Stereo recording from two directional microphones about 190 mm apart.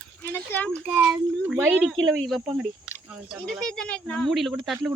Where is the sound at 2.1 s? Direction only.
Centre (ahead or behind).